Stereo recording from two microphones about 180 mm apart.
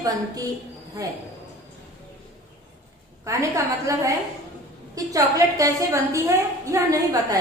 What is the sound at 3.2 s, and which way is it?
A woman's voice, 15° right (ahead or behind).